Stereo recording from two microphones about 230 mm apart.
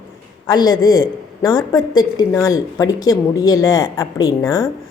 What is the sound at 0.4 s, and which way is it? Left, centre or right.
A woman's voice, centre.